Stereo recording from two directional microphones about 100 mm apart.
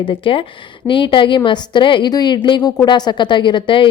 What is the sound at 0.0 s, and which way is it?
A woman's voice, 60° left (ahead or behind).